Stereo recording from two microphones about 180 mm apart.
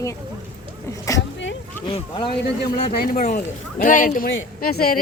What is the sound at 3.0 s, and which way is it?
A man's voice, 55° left (ahead or behind).